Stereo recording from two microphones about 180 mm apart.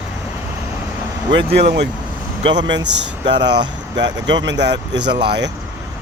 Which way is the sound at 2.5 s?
80° right.